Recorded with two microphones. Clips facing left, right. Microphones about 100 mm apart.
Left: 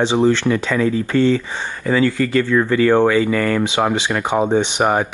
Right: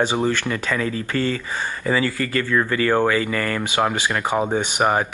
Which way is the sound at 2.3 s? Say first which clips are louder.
Left 5 dB; 15° left (ahead or behind).